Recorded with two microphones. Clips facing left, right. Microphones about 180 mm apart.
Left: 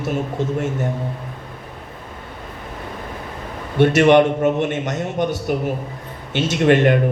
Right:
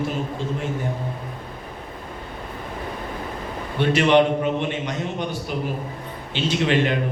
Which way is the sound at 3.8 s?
55° left (ahead or behind).